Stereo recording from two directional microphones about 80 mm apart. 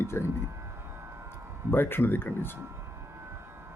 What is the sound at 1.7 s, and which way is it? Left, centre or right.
Speech, left.